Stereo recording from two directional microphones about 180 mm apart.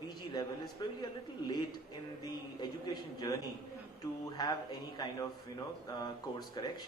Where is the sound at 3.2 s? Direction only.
25° left (ahead or behind).